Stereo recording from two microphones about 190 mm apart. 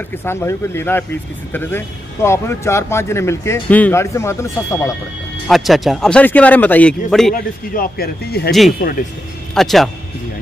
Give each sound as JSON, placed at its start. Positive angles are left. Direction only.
{"t": 0.2, "sound": "speech", "side_deg": 10}
{"t": 5.5, "sound": "a man's voice", "side_deg": 0}
{"t": 7.3, "sound": "speech", "side_deg": 50}
{"t": 8.5, "sound": "a man's voice", "side_deg": 0}